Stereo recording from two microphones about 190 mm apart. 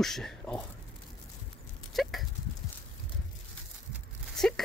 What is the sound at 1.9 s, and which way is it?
Dog, centre (ahead or behind).